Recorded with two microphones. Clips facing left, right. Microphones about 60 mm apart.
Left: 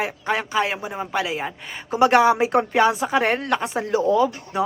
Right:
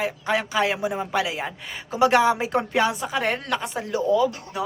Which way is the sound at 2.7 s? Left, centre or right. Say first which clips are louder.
Left 4 dB; left.